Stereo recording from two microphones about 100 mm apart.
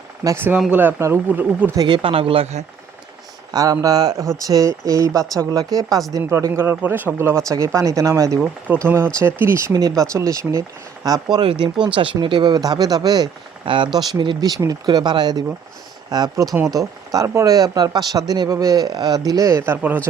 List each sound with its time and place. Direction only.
0.3 s speech: 25° right (ahead or behind)
1.7 s speech: 40° right (ahead or behind)
2.0 s speech: 65° right (ahead or behind); by 2.6 s 80° right
3.5 s speech: 35° right (ahead or behind)
8.4 s speech: 15° right (ahead or behind)
9.7 s speech: 40° right (ahead or behind)
11.9 s speech: 55° right (ahead or behind); by 20.0 s 20° right (ahead or behind)